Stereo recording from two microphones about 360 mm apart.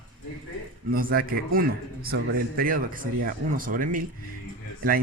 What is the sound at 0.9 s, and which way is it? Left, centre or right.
Speech, right.